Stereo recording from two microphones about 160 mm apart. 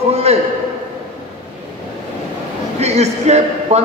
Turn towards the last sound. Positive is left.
turn(degrees=-45)  # may be behind; listen again after turning